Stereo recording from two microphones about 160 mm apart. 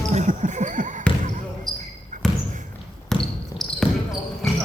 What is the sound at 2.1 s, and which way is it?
Basketball bounce, 50° right (ahead or behind).